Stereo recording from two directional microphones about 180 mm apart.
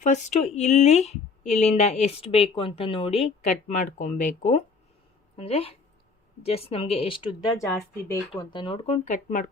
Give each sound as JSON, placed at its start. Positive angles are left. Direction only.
{"t": 0.0, "sound": "speech", "side_deg": 45}